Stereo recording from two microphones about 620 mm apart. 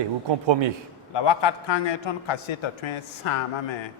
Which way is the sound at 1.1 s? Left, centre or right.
Left.